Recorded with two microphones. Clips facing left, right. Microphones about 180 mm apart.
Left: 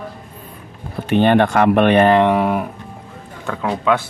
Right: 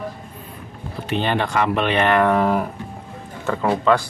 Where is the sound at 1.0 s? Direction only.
55° left (ahead or behind).